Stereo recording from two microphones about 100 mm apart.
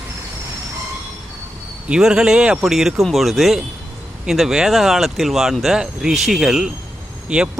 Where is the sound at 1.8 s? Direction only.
10° right (ahead or behind).